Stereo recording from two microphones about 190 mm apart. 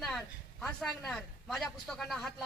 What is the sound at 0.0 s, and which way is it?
Speech, centre (ahead or behind).